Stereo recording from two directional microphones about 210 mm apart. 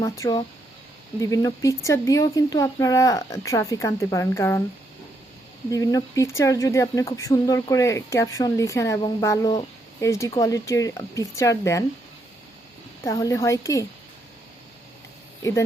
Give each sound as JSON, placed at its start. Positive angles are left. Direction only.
{"t": 0.0, "sound": "speech", "side_deg": 15}
{"t": 5.7, "sound": "speech", "side_deg": 15}
{"t": 13.1, "sound": "speech", "side_deg": 15}
{"t": 15.4, "sound": "speech", "side_deg": 15}